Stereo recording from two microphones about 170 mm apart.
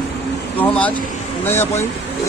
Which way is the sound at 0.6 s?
5° left (ahead or behind).